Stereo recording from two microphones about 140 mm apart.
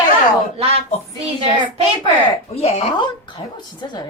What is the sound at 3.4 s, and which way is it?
Speech, 30° left (ahead or behind).